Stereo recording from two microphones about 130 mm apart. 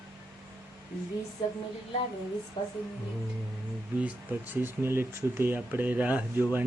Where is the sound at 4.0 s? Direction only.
10° right (ahead or behind).